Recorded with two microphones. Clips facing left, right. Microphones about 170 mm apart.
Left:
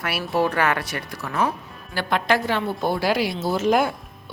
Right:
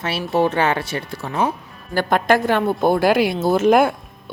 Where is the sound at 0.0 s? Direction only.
25° right (ahead or behind).